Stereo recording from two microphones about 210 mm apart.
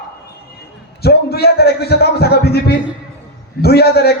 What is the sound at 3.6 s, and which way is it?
Speech, 50° left (ahead or behind).